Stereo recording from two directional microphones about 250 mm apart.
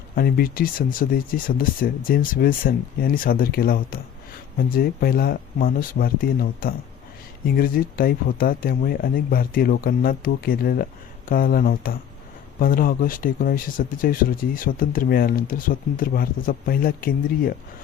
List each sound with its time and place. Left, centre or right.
0.2 s speech: left